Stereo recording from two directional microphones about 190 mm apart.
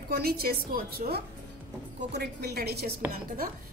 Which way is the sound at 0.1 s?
55° right (ahead or behind).